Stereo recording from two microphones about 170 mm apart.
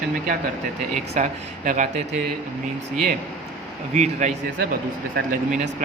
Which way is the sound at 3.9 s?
45° right (ahead or behind).